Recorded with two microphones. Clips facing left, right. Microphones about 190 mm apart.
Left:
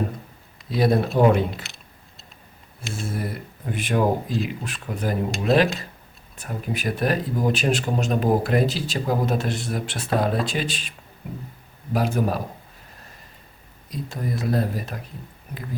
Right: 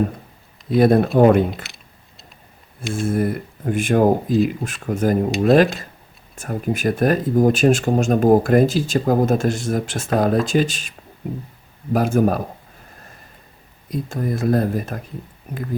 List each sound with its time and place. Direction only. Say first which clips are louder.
0.7 s speech: right 6 dB; 55° right (ahead or behind)
2.9 s speech: right 9 dB; 50° right (ahead or behind)
11.9 s speech: right 6 dB; 50° right (ahead or behind)
13.9 s speech: right 5 dB; 50° right (ahead or behind)